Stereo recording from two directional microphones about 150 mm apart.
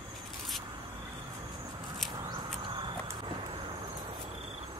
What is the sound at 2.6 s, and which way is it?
Walk, 30° right (ahead or behind).